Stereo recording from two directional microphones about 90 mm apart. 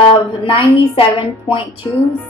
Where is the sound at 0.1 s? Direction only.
85° left.